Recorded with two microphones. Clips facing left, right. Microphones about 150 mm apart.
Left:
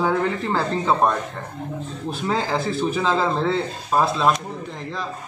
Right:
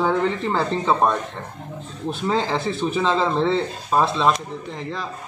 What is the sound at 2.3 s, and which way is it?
Speech, 5° left (ahead or behind).